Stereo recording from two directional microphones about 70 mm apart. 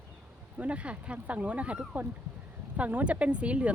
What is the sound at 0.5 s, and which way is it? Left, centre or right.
Speech, centre.